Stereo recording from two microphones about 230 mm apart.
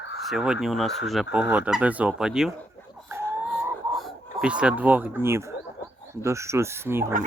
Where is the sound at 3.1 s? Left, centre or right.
Centre.